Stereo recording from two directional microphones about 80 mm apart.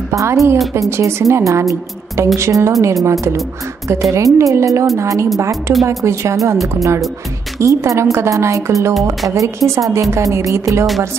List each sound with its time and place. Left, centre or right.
0.1 s speech: right
7.6 s speech: right